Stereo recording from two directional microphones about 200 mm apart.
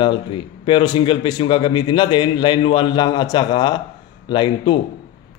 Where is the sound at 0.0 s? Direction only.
25° left (ahead or behind).